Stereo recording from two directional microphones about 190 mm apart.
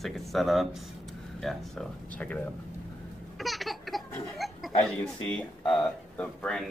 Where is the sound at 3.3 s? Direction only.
Centre (ahead or behind).